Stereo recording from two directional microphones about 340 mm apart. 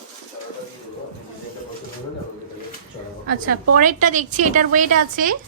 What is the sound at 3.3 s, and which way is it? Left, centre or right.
A woman's voice, right.